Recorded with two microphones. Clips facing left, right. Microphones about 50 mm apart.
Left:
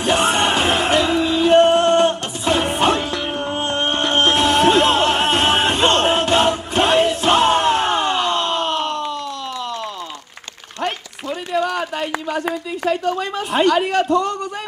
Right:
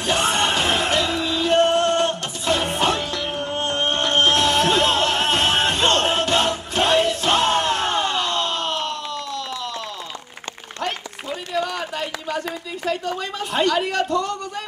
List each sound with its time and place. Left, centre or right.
0.0 s music: centre
11.2 s run: centre
12.9 s speech: centre